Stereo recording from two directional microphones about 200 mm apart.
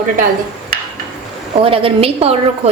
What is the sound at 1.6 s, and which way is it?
A woman's voice, 30° right (ahead or behind).